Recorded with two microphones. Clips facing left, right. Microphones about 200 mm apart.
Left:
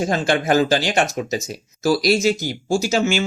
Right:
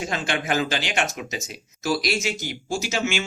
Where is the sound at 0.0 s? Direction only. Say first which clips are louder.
Left 8 dB; 40° left (ahead or behind).